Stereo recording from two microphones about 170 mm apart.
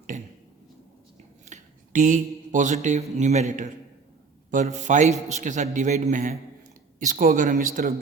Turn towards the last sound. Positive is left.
turn(degrees=-50)  # may be behind; listen again after turning